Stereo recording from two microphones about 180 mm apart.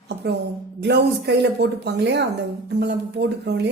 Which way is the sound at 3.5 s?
70° right (ahead or behind).